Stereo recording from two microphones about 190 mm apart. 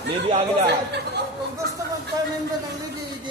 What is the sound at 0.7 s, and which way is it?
Speech, 60° right (ahead or behind).